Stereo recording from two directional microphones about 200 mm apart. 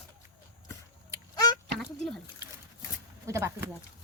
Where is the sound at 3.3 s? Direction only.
15° right (ahead or behind).